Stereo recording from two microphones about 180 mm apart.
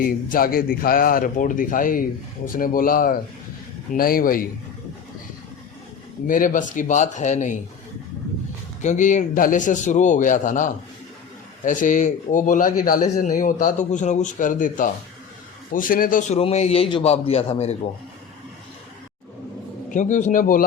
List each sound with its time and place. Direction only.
0.0 s speech: 55° left (ahead or behind)
6.2 s speech: 50° left (ahead or behind)
8.8 s a man's voice: 45° left (ahead or behind)
19.9 s speech: 45° left (ahead or behind)